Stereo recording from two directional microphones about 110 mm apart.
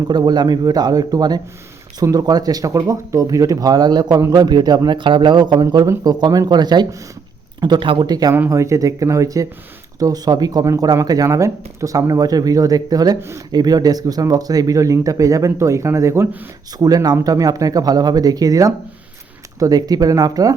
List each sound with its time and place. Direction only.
0.1 s speech: 40° right (ahead or behind)
5.6 s speech: 30° right (ahead or behind)
13.1 s speech: 25° right (ahead or behind)
13.5 s speech: 35° right (ahead or behind)
16.7 s speech: 35° right (ahead or behind)